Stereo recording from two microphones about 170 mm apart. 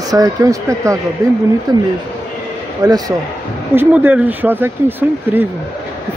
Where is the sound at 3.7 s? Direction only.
10° right (ahead or behind).